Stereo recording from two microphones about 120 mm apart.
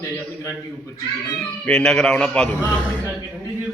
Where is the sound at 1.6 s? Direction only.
5° left (ahead or behind).